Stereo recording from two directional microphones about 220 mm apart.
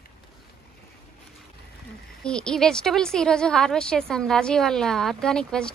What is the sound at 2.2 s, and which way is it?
A woman's voice, 5° left (ahead or behind).